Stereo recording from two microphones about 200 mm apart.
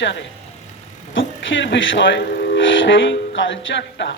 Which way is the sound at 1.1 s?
70° left (ahead or behind).